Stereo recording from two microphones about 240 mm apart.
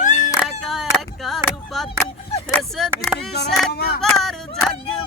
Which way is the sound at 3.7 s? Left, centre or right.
Left.